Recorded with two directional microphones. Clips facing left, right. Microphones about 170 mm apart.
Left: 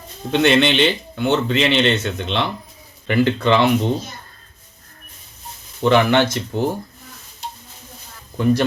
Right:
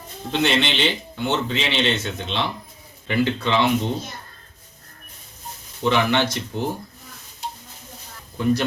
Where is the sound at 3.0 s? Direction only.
55° left (ahead or behind).